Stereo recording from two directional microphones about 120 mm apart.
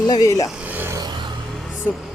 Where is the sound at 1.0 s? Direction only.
40° right (ahead or behind).